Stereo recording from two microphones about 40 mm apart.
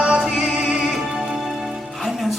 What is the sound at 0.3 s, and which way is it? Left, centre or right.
Music, centre.